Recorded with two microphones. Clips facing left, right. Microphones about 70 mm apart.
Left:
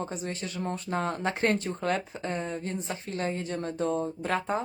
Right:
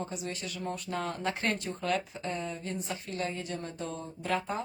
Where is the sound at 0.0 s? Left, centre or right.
Left.